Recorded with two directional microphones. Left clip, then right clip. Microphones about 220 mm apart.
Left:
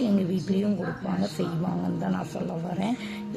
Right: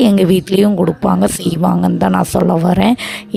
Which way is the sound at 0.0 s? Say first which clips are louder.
Right 16 dB; 45° right (ahead or behind).